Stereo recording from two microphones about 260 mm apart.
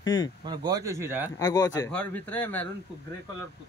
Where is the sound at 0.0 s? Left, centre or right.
Centre.